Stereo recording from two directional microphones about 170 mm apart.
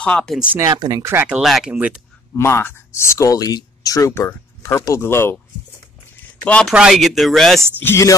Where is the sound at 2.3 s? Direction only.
15° left (ahead or behind).